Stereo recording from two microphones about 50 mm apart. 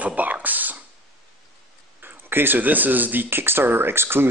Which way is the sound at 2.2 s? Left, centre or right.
Right.